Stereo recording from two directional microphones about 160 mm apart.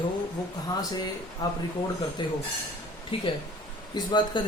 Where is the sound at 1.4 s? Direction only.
25° left (ahead or behind).